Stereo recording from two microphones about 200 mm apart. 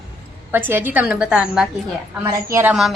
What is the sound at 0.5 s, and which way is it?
A woman's voice, 10° right (ahead or behind).